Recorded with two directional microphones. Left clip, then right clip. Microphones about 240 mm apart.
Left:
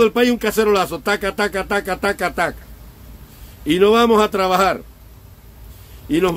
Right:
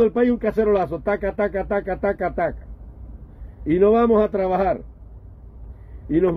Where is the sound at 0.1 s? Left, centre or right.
Centre.